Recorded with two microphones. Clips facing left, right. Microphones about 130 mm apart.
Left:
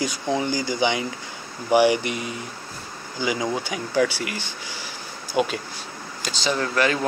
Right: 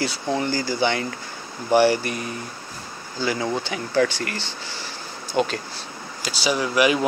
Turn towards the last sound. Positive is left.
turn(degrees=-15)  # may be behind; listen again after turning